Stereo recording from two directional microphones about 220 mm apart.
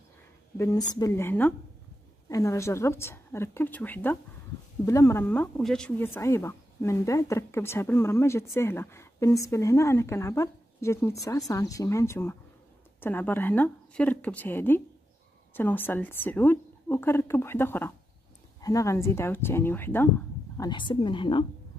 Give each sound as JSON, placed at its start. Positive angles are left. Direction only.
{"t": 0.6, "sound": "a woman's voice", "side_deg": 15}